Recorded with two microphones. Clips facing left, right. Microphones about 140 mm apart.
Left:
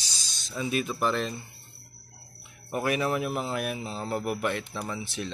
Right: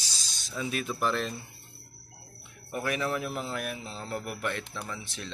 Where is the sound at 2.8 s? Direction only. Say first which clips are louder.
Left 4 dB; 15° left (ahead or behind).